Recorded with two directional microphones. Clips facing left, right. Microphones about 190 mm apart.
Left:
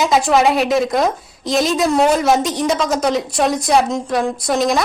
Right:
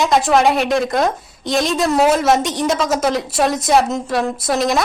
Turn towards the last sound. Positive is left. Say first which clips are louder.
# left 1 dB
turn(degrees=0)  # may be behind; listen again after turning